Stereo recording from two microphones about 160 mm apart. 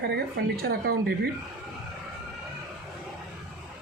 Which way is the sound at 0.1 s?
70° right (ahead or behind).